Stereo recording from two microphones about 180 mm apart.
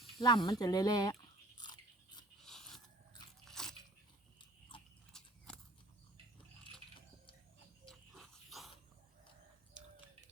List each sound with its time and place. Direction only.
0.2 s chewing: 25° left (ahead or behind)
2.4 s biting: centre (ahead or behind)
3.4 s crunch: centre (ahead or behind)
4.7 s horse: 25° left (ahead or behind)
5.1 s a sound: 5° left (ahead or behind)
7.9 s a sound: centre (ahead or behind)